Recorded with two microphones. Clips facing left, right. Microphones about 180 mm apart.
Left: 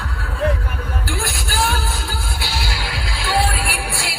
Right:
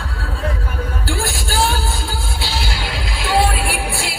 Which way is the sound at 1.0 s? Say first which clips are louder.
Right 4 dB; 30° right (ahead or behind).